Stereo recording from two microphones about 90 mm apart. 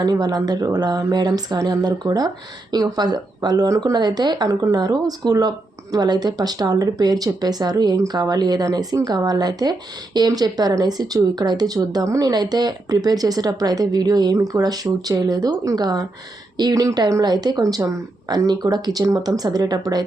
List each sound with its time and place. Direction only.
0.0 s speech: 45° right (ahead or behind)